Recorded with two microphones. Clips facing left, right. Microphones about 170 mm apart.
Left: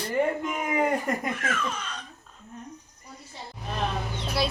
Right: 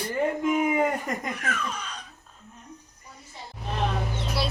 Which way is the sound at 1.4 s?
10° right (ahead or behind).